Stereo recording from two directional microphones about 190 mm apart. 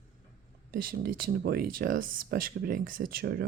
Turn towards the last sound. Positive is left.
turn(degrees=-55)  # may be behind; listen again after turning